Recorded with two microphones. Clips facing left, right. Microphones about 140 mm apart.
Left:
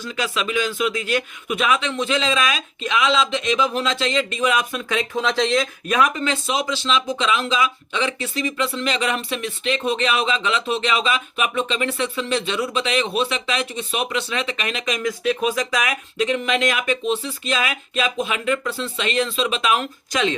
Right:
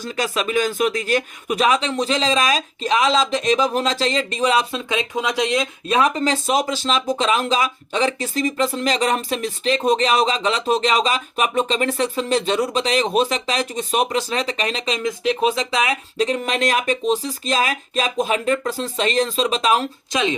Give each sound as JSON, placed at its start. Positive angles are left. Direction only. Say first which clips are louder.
{"t": 0.0, "sound": "speech", "louder": "right 2 dB", "side_deg": -40}